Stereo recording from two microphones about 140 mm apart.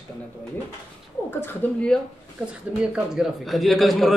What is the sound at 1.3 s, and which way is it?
Speech, 15° left (ahead or behind).